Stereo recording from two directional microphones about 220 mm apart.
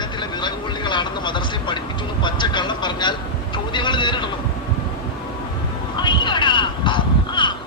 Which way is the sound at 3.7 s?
20° left (ahead or behind).